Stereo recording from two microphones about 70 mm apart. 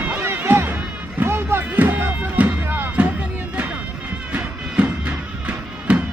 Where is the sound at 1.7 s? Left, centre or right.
Right.